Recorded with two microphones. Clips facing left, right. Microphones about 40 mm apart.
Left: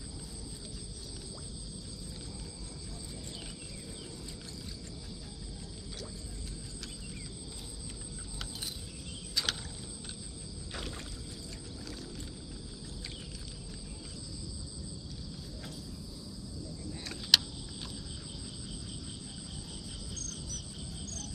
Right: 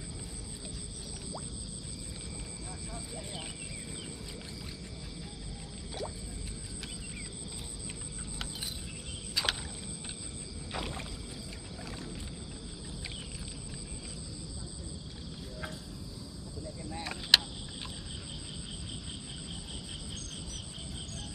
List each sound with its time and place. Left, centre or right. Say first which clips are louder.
9.3 s rowboat: right 2 dB; centre
10.7 s rowboat: right 4 dB; centre
16.9 s a sound: right 2 dB; right
20.2 s cricket: right 1 dB; right